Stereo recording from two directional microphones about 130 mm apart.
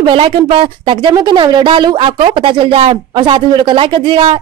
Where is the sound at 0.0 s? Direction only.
40° right (ahead or behind).